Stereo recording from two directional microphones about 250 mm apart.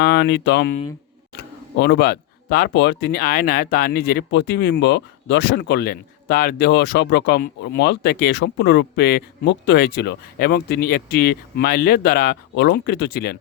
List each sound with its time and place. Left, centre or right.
0.0 s speech: left